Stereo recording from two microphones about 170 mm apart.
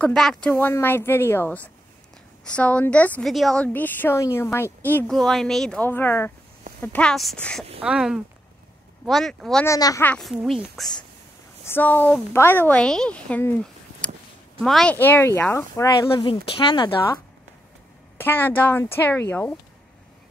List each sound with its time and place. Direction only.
0.0 s a woman's voice: 5° left (ahead or behind)
9.7 s speech: 20° left (ahead or behind)
10.0 s a woman's voice: 5° left (ahead or behind)
11.6 s a woman's voice: 10° left (ahead or behind)
16.1 s speech: 30° left (ahead or behind)
18.1 s a woman's voice: 10° left (ahead or behind)